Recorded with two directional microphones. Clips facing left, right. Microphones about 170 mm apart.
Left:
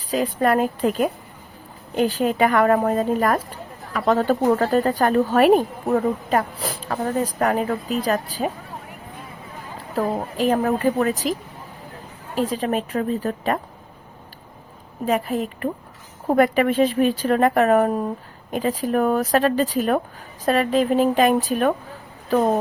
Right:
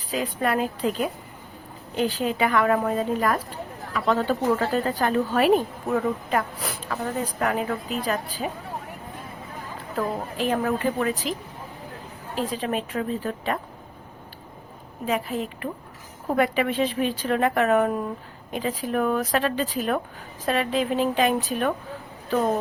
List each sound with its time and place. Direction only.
0.1 s a woman's voice: 40° left (ahead or behind)
9.9 s a woman's voice: 40° left (ahead or behind)
15.0 s a woman's voice: 45° left (ahead or behind)